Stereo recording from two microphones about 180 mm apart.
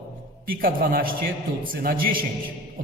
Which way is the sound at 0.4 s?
55° right (ahead or behind).